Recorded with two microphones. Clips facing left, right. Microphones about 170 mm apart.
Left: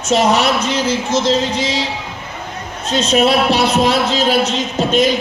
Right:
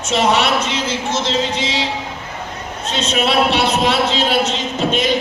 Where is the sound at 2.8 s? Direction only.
40° left (ahead or behind).